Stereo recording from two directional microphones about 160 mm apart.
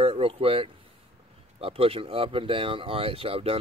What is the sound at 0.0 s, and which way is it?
Speech, 35° right (ahead or behind).